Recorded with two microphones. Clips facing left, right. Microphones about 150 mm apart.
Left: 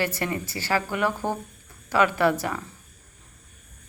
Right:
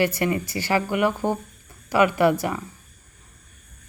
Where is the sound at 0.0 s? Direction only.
15° right (ahead or behind).